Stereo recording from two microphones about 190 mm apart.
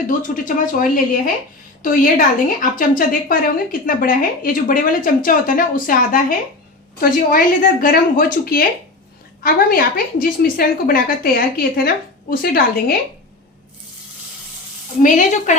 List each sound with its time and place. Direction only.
0.2 s a woman's voice: 45° left (ahead or behind)
15.0 s speech: 40° left (ahead or behind)